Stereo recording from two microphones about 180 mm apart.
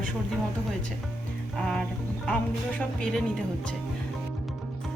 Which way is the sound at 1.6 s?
5° left (ahead or behind).